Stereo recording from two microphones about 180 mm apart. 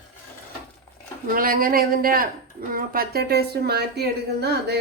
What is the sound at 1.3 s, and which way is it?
A woman's voice, 55° right (ahead or behind).